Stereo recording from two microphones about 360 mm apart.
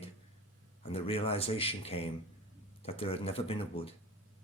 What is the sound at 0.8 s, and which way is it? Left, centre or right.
Speech, centre.